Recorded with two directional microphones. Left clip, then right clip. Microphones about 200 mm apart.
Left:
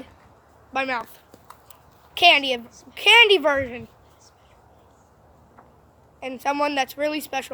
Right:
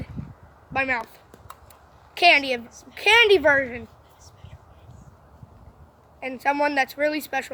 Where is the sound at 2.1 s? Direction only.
5° left (ahead or behind).